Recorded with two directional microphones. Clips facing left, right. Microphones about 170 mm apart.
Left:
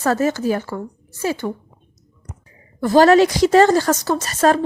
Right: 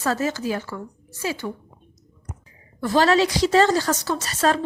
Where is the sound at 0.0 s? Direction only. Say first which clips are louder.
Left 5 dB; 50° left (ahead or behind).